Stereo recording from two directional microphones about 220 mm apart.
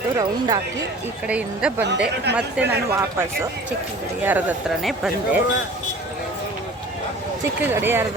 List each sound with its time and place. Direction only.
0.2 s speech: 15° right (ahead or behind)
1.3 s speech: 5° right (ahead or behind)
1.8 s speech: 50° right (ahead or behind)
2.3 s speech: 5° right (ahead or behind)
7.6 s speech: 10° right (ahead or behind)